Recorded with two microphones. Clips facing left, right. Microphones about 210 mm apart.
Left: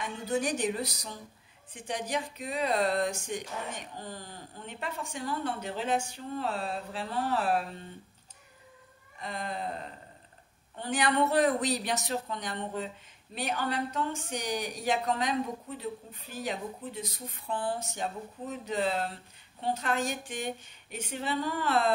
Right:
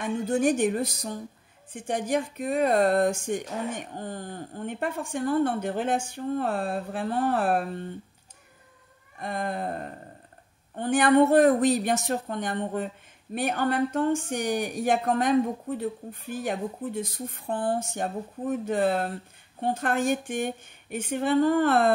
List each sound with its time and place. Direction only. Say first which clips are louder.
0.0 s a woman's voice: right 7 dB; 50° right (ahead or behind)
9.2 s a woman's voice: right 6 dB; 55° right (ahead or behind)